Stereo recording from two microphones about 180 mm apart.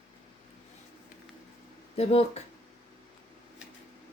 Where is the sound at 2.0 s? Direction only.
35° left (ahead or behind).